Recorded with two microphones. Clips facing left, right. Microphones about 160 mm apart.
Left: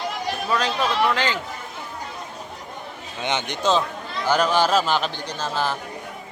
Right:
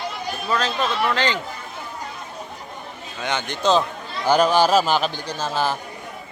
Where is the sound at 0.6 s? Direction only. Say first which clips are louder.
Left 2 dB; 10° left (ahead or behind).